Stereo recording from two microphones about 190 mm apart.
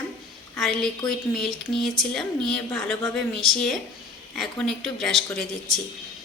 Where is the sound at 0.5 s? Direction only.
Centre (ahead or behind).